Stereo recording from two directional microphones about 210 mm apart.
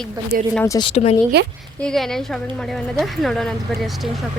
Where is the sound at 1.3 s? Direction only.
50° right (ahead or behind).